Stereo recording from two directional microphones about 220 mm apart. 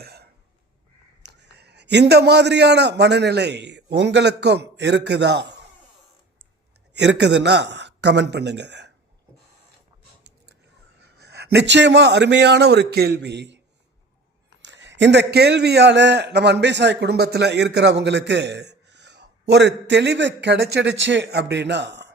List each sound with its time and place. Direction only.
0.0 s cough: 45° right (ahead or behind)
1.3 s a man's voice: 50° right (ahead or behind)
6.9 s a man's voice: 50° right (ahead or behind)
11.2 s a man's voice: 50° right (ahead or behind)
14.6 s a man's voice: 55° right (ahead or behind)